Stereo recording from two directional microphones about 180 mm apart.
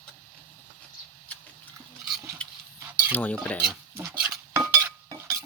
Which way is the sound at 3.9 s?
15° right (ahead or behind).